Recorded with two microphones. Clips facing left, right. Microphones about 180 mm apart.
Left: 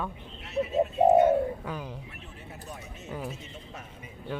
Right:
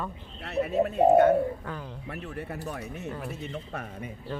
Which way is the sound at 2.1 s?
65° right (ahead or behind).